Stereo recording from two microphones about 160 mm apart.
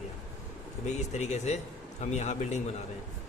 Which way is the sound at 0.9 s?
45° left (ahead or behind).